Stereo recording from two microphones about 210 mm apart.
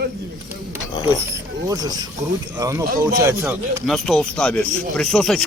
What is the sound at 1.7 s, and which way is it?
Speech, 20° right (ahead or behind).